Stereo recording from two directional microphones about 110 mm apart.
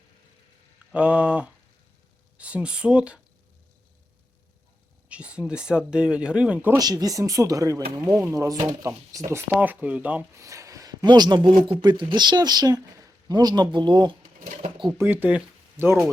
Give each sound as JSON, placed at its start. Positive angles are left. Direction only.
{"t": 0.9, "sound": "speech", "side_deg": -10}
{"t": 5.0, "sound": "speech", "side_deg": -10}
{"t": 6.7, "sound": "speech", "side_deg": -35}
{"t": 10.3, "sound": "a man's voice", "side_deg": -30}
{"t": 14.9, "sound": "speech", "side_deg": -20}